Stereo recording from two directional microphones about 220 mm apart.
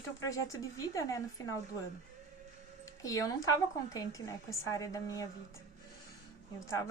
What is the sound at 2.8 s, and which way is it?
A woman's voice, 15° left (ahead or behind).